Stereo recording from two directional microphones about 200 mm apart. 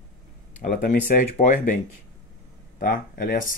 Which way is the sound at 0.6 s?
45° left (ahead or behind).